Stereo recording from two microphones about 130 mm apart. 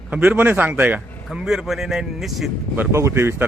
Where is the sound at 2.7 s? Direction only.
20° right (ahead or behind).